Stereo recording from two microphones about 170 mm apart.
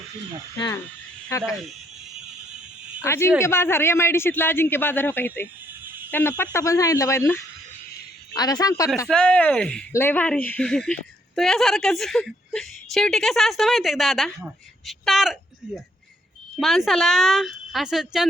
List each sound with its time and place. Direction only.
1.3 s a woman's voice: 20° left (ahead or behind)
3.0 s a man's voice: 15° left (ahead or behind)
5.8 s a sound: 10° right (ahead or behind)
6.1 s a man's voice: 10° left (ahead or behind)
9.0 s a man's voice: 5° left (ahead or behind)